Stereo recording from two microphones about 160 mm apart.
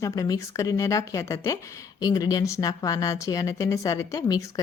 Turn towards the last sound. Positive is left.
turn(degrees=20)  # may be behind; listen again after turning